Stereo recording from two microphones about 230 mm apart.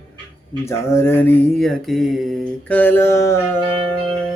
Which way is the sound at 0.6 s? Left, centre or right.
Centre.